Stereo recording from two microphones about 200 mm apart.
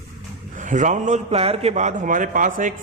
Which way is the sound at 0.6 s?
40° right (ahead or behind).